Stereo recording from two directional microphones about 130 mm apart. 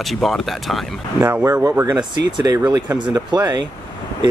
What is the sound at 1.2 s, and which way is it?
Speech, 20° right (ahead or behind).